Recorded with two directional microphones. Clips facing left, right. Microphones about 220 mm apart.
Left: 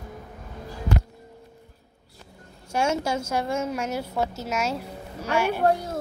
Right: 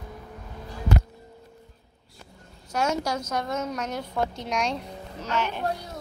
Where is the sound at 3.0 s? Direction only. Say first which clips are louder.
Left 2 dB; 25° left (ahead or behind).